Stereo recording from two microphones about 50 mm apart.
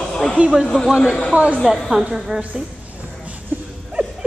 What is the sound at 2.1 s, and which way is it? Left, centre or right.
Speech, centre.